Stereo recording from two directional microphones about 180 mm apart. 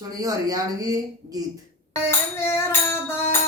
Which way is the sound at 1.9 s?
15° left (ahead or behind).